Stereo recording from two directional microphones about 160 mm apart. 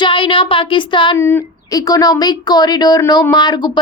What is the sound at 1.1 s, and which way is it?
A woman's voice, 15° left (ahead or behind).